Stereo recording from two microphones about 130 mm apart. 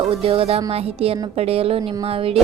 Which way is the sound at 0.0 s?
45° right (ahead or behind).